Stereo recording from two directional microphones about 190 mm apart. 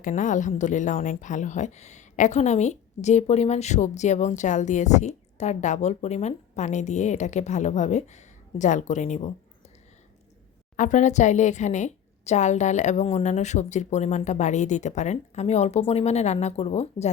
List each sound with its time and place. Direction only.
0.0 s a woman's voice: 45° left (ahead or behind)
10.8 s a woman's voice: 40° left (ahead or behind)